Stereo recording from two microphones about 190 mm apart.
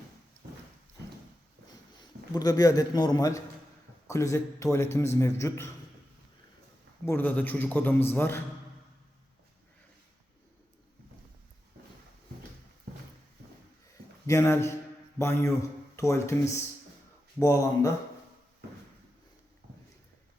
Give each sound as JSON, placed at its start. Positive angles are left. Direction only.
{"t": 1.9, "sound": "a man's voice", "side_deg": 20}
{"t": 7.0, "sound": "a man's voice", "side_deg": 10}
{"t": 14.3, "sound": "a man's voice", "side_deg": 15}